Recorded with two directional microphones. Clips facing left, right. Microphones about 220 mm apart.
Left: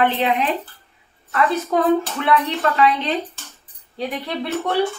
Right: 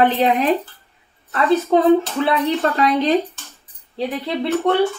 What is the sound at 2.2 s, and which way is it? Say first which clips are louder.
Speech: right 2 dB; 35° right (ahead or behind).